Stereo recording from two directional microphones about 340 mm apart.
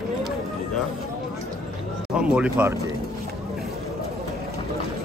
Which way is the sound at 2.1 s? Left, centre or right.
Centre.